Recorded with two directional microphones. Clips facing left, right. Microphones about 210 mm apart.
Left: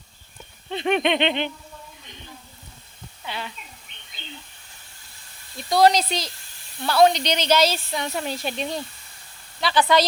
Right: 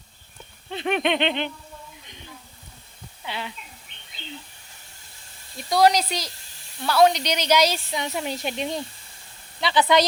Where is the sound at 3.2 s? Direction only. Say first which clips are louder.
Even; 20° right (ahead or behind).